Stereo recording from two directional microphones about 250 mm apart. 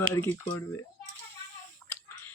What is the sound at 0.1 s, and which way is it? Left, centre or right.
Speech, centre.